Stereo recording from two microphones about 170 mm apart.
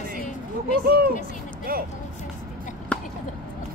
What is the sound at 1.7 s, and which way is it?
Speech, 60° right (ahead or behind).